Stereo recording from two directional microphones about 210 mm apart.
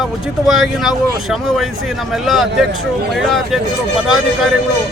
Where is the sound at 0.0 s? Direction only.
Centre (ahead or behind).